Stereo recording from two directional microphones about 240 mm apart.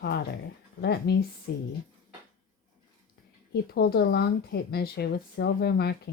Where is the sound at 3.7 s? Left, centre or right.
Left.